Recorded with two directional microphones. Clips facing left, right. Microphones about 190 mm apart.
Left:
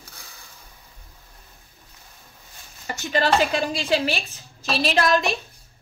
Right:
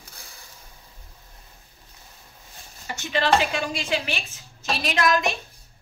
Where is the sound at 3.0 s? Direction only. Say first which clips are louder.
Left 1 dB; 40° left (ahead or behind).